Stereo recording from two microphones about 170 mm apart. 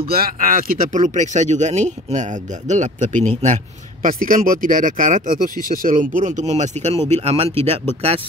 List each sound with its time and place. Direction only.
0.1 s speech: 60° right (ahead or behind); by 8.2 s 35° right (ahead or behind)